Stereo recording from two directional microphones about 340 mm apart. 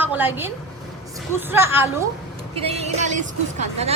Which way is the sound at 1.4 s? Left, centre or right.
Centre.